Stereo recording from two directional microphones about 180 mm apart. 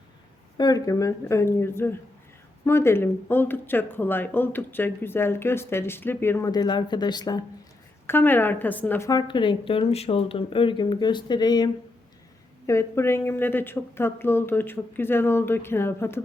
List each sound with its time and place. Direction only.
0.5 s speech: 20° left (ahead or behind)
8.0 s a woman's voice: 10° left (ahead or behind)